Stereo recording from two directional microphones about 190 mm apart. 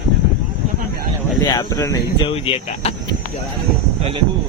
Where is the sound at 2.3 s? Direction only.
30° left (ahead or behind).